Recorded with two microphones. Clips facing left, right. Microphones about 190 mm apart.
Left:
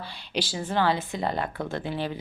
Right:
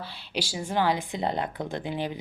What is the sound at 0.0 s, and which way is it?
Speech, 10° right (ahead or behind).